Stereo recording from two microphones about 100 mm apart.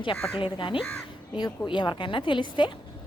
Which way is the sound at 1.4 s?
50° left (ahead or behind).